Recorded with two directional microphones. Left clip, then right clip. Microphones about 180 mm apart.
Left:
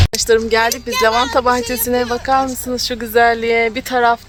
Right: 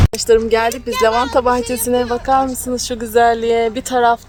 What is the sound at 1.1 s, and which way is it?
Speech, 35° left (ahead or behind).